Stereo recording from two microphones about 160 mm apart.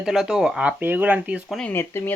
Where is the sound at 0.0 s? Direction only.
5° right (ahead or behind).